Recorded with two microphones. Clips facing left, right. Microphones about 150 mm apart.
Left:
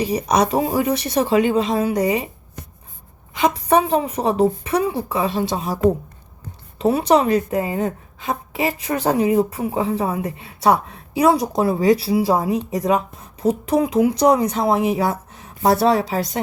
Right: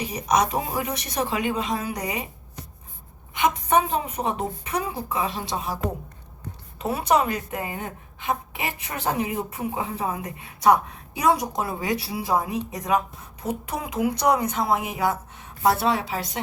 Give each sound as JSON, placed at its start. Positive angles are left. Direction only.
{"t": 0.0, "sound": "speech", "side_deg": 30}
{"t": 3.3, "sound": "speech", "side_deg": 35}
{"t": 6.7, "sound": "speech", "side_deg": 25}
{"t": 15.4, "sound": "a woman's voice", "side_deg": 40}